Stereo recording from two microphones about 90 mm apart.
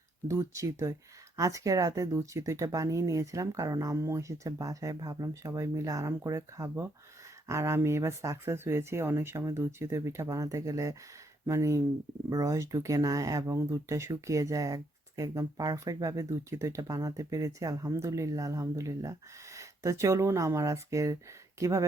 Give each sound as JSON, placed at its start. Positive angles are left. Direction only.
{"t": 0.3, "sound": "speech", "side_deg": -35}